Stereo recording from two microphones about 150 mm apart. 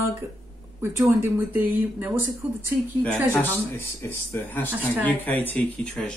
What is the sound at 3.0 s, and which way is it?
Speech, 15° left (ahead or behind).